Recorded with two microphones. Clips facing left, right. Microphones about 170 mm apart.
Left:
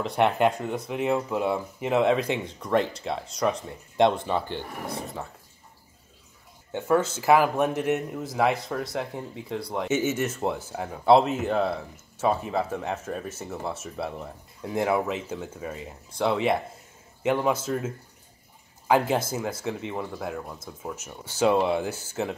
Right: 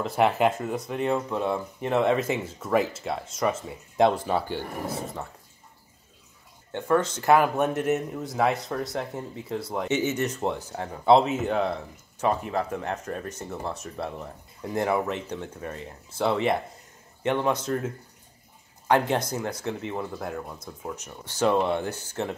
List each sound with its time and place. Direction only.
0.0 s speech: centre (ahead or behind)
6.7 s speech: 5° left (ahead or behind)